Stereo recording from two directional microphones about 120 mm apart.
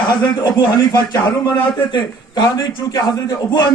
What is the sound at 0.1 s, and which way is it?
A man's voice, 35° left (ahead or behind).